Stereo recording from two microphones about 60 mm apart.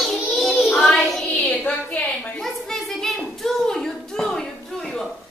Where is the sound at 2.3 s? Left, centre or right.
Centre.